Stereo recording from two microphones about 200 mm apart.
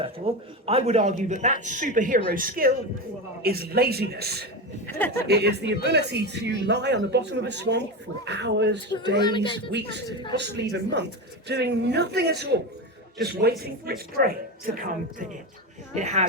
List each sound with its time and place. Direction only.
0.3 s a man's voice: 30° right (ahead or behind); by 4.4 s 50° right (ahead or behind)
4.9 s speech: 10° left (ahead or behind)
5.3 s speech: 55° right (ahead or behind)
9.2 s speech: 25° left (ahead or behind)
10.3 s a woman's voice: 60° right (ahead or behind)
16.0 s speech: 35° right (ahead or behind)